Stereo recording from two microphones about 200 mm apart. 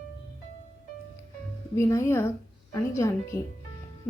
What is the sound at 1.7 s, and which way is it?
A woman's voice, 15° left (ahead or behind).